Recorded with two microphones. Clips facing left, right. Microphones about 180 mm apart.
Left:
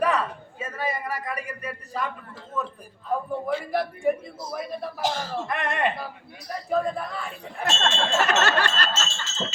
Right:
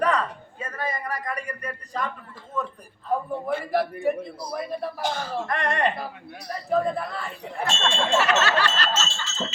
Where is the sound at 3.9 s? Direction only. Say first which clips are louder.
Even; centre (ahead or behind).